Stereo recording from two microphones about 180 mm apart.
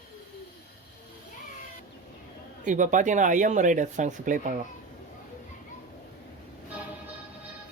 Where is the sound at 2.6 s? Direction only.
45° right (ahead or behind).